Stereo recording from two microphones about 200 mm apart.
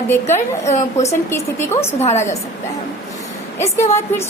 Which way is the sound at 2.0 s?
35° left (ahead or behind).